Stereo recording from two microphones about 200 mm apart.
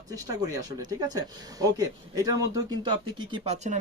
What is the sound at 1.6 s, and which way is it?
Speech, 20° right (ahead or behind).